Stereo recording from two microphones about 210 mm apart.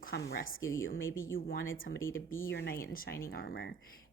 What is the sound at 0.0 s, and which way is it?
Speech, 50° left (ahead or behind).